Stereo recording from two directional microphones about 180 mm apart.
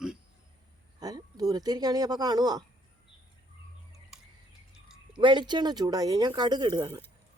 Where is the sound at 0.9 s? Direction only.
20° right (ahead or behind).